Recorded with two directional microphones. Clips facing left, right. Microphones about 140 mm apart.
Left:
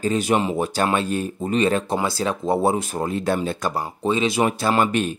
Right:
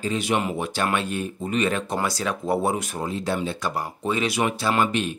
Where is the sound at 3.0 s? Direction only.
55° left (ahead or behind).